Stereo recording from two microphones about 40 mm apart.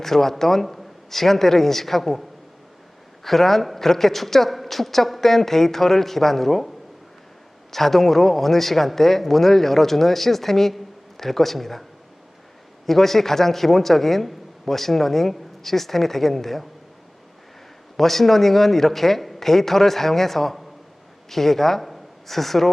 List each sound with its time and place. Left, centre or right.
0.0 s speech: centre
3.2 s speech: centre
17.9 s speech: centre